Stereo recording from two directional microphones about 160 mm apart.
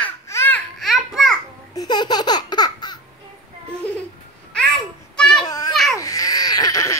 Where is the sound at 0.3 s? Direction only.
15° left (ahead or behind).